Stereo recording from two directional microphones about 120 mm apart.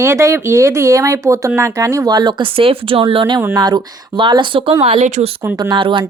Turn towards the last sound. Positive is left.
turn(degrees=-45)  # may be behind; listen again after turning